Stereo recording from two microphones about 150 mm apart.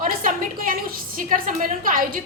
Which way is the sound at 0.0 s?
65° right (ahead or behind).